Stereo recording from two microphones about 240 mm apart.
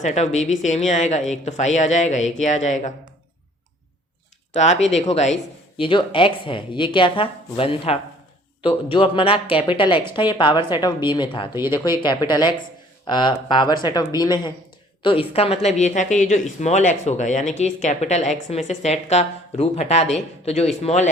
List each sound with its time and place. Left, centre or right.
0.0 s speech: left
4.5 s speech: left